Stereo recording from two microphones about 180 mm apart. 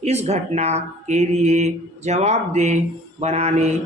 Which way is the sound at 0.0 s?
35° right (ahead or behind).